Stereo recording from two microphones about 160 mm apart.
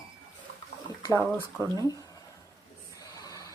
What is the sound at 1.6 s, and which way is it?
Speech, 25° right (ahead or behind).